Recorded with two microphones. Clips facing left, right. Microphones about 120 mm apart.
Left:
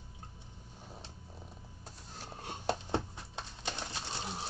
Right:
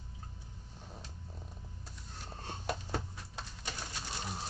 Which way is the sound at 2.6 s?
25° left (ahead or behind).